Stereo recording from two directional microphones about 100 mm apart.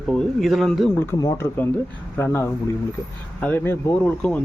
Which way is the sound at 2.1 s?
25° left (ahead or behind).